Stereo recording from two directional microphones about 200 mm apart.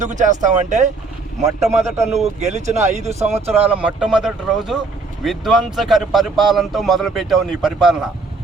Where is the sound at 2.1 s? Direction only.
35° right (ahead or behind).